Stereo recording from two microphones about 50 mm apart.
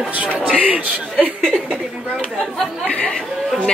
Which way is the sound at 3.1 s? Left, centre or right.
Centre.